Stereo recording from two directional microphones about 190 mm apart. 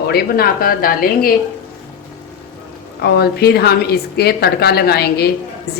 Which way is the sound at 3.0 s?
55° left (ahead or behind).